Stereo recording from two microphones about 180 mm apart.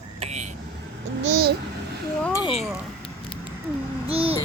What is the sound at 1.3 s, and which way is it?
Speech, 60° right (ahead or behind).